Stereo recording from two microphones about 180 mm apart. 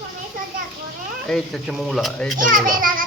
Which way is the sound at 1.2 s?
5° left (ahead or behind).